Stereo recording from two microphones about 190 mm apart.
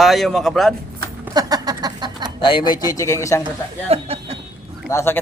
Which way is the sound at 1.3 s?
20° right (ahead or behind).